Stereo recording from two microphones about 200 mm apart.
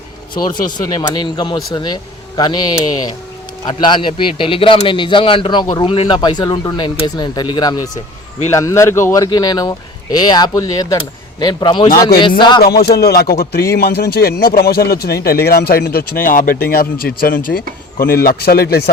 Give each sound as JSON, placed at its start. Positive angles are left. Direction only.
{"t": 0.4, "sound": "speech", "side_deg": 20}
{"t": 12.6, "sound": "speech", "side_deg": 50}